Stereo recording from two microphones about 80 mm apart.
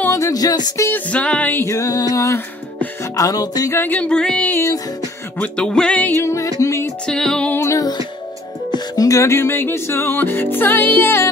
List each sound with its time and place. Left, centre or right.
0.1 s music: left
0.9 s music: centre
1.6 s music: left
3.7 s music: left
4.0 s music: centre
5.6 s music: centre
6.1 s music: left
7.1 s music: centre
7.5 s music: left
8.7 s music: left